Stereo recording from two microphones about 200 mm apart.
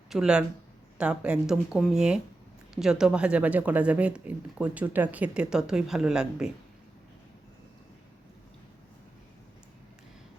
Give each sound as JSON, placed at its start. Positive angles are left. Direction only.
{"t": 0.1, "sound": "speech", "side_deg": -5}